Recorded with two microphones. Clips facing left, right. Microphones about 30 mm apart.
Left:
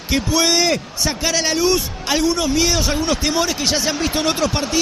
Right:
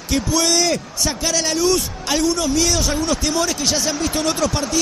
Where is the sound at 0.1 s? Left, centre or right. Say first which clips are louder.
Left 1 dB; centre.